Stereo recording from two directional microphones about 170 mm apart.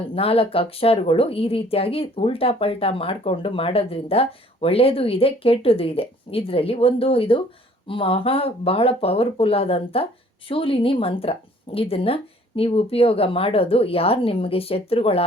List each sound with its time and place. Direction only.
0.1 s a woman's voice: 35° left (ahead or behind)